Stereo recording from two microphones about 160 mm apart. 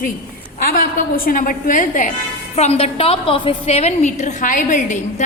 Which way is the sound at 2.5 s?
40° left (ahead or behind).